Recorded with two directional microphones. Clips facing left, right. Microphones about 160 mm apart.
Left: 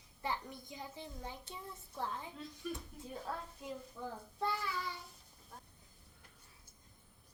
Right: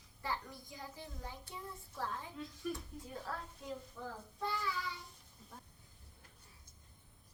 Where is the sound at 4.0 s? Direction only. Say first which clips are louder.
Left 2 dB; 5° left (ahead or behind).